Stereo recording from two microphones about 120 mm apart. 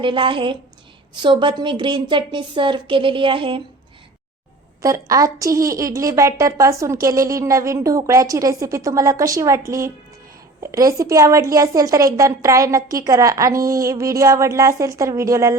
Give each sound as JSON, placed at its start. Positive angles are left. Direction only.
{"t": 0.0, "sound": "a woman's voice", "side_deg": -45}
{"t": 4.8, "sound": "a woman's voice", "side_deg": -30}